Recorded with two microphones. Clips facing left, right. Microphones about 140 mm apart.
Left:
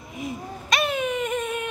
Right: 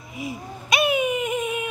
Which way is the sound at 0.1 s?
5° right (ahead or behind).